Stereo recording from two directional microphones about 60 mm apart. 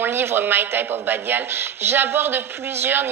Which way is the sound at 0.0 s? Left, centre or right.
Right.